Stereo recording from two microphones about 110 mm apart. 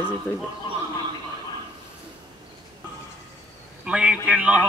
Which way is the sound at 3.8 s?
10° right (ahead or behind).